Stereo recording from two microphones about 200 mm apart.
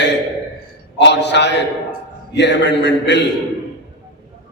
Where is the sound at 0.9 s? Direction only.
60° left (ahead or behind).